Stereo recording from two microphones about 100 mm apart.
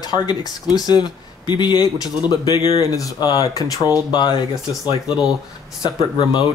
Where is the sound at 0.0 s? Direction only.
40° left (ahead or behind).